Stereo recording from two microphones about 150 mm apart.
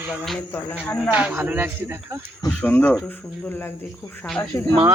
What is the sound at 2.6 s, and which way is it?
Speech, 10° left (ahead or behind).